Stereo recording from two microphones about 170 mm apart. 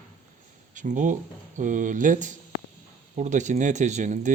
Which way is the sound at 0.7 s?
50° right (ahead or behind).